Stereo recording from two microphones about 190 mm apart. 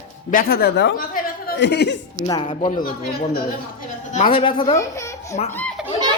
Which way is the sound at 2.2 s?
25° left (ahead or behind).